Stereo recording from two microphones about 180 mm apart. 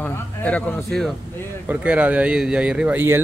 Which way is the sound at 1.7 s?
10° right (ahead or behind).